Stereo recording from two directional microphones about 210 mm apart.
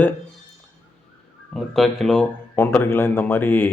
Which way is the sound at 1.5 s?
Centre (ahead or behind).